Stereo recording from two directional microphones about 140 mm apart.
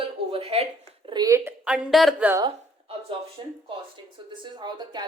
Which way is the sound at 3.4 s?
35° right (ahead or behind).